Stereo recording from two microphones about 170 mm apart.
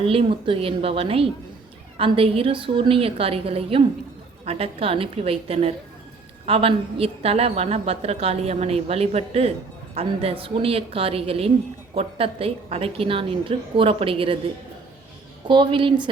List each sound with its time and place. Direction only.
0.0 s a woman's voice: 35° right (ahead or behind)
15.4 s a woman's voice: 30° right (ahead or behind)